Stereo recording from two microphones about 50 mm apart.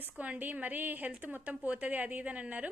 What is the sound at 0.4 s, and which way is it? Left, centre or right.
A woman's voice, right.